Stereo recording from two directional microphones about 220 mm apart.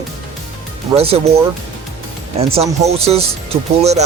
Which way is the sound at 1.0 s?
30° right (ahead or behind).